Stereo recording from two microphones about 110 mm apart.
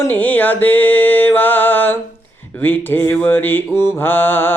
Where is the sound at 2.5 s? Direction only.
15° left (ahead or behind).